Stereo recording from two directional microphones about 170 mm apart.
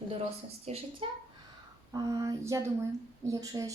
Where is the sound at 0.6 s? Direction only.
35° right (ahead or behind).